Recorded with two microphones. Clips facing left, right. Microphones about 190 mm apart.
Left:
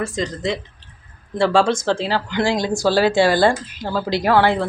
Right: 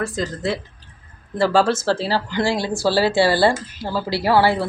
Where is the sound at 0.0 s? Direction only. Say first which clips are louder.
Left 1 dB; centre (ahead or behind).